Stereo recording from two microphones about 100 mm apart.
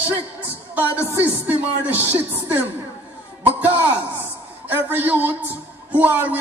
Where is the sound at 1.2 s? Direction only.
15° right (ahead or behind).